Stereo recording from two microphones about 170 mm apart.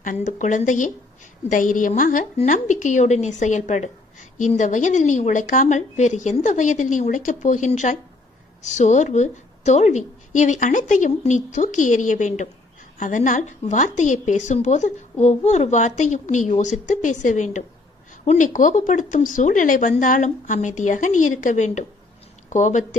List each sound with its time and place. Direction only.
0.0 s a woman's voice: 50° left (ahead or behind)